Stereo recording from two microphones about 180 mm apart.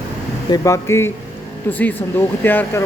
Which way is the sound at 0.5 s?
15° left (ahead or behind).